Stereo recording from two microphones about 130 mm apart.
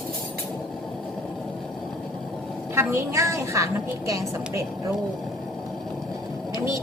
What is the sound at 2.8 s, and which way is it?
A woman's voice, 20° right (ahead or behind).